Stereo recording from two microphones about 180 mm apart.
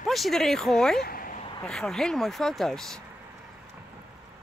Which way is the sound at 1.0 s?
50° left (ahead or behind).